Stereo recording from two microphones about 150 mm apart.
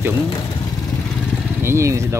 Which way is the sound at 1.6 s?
20° right (ahead or behind).